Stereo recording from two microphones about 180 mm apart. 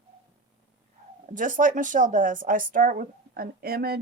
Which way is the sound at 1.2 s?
45° right (ahead or behind).